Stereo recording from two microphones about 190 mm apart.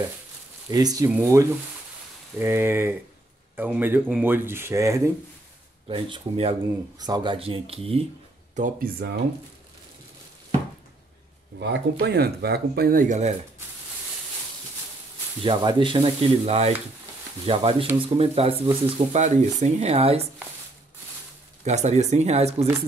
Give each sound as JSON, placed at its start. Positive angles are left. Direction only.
{"t": 0.7, "sound": "speech", "side_deg": -20}
{"t": 11.6, "sound": "speech", "side_deg": -60}
{"t": 15.4, "sound": "speech", "side_deg": -25}
{"t": 21.6, "sound": "speech", "side_deg": -35}